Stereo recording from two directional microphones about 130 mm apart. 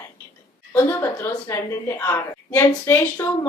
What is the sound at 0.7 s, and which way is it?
A woman's voice, 20° left (ahead or behind).